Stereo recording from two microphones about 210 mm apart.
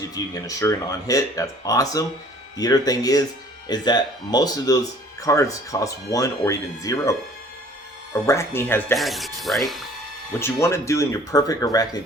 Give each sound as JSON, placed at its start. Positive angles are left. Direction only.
{"t": 0.1, "sound": "speech", "side_deg": 15}
{"t": 9.0, "sound": "speech", "side_deg": 0}
{"t": 10.4, "sound": "speech", "side_deg": 15}